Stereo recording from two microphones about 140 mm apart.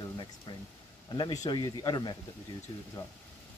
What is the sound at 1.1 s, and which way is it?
Speech, 30° left (ahead or behind).